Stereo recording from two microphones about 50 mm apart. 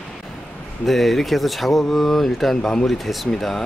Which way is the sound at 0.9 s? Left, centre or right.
Centre.